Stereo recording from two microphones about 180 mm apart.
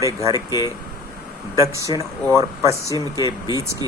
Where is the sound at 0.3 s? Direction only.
25° left (ahead or behind).